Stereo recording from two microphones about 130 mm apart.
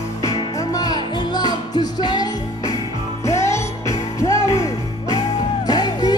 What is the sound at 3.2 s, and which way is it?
Music, 20° left (ahead or behind).